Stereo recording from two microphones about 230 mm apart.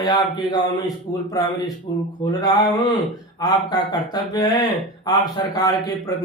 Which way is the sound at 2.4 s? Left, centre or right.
Centre.